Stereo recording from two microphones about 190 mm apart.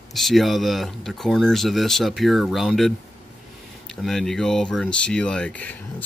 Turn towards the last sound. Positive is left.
turn(degrees=5)  # may be behind; listen again after turning